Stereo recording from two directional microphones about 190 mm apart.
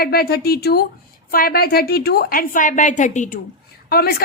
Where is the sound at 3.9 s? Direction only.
50° left (ahead or behind).